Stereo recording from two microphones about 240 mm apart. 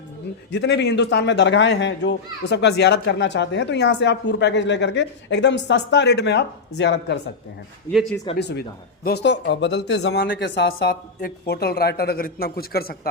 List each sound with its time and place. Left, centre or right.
0.5 s speech: left
8.1 s speech: centre
8.4 s speech: left